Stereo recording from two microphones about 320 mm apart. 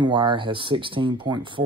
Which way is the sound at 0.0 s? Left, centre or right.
Centre.